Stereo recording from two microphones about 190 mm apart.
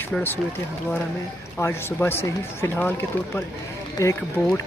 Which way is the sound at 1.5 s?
10° left (ahead or behind).